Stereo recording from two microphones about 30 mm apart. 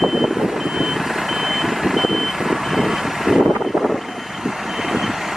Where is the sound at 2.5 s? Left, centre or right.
Centre.